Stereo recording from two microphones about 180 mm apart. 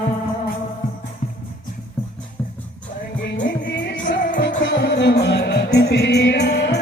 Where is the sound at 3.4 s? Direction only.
75° left (ahead or behind).